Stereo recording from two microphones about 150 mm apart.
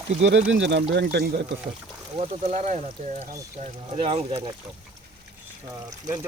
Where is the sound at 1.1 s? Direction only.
90° right.